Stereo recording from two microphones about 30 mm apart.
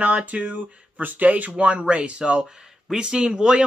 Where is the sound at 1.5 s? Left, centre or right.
Right.